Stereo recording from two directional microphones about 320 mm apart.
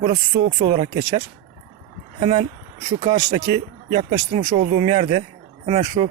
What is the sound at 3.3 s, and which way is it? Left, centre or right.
Speech, right.